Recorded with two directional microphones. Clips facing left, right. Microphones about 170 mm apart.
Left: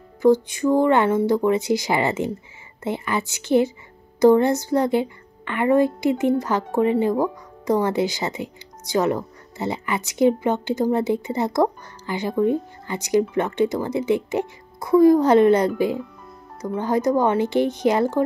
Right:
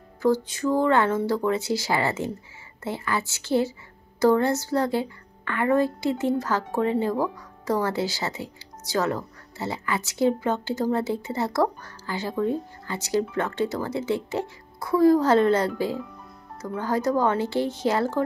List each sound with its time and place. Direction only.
0.2 s a woman's voice: 15° left (ahead or behind)